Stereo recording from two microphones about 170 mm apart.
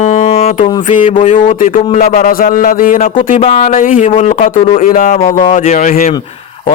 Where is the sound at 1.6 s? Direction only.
50° left (ahead or behind).